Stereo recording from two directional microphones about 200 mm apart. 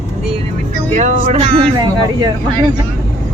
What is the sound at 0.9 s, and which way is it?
Speech, 35° right (ahead or behind).